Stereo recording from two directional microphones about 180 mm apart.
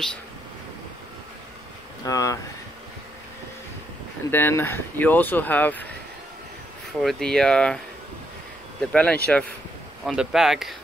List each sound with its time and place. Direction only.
2.0 s speech: 20° left (ahead or behind)
4.3 s speech: 10° left (ahead or behind)
7.0 s speech: centre (ahead or behind)
8.9 s speech: 5° left (ahead or behind)